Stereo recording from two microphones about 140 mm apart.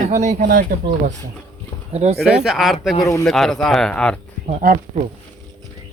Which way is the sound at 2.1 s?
Centre (ahead or behind).